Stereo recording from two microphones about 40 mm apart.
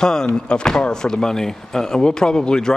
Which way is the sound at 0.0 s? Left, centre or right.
Centre.